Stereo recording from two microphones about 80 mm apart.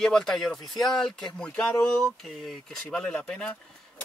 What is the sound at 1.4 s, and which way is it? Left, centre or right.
Speech, centre.